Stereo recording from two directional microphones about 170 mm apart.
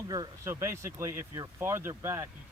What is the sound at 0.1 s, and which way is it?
Speech, 20° right (ahead or behind).